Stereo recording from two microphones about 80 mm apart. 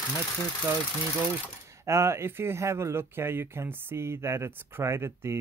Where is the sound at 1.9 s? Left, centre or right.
Right.